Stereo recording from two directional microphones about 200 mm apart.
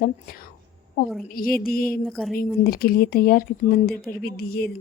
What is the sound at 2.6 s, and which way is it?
A woman's voice, 50° left (ahead or behind).